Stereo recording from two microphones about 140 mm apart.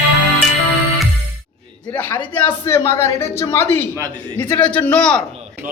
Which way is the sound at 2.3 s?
15° left (ahead or behind).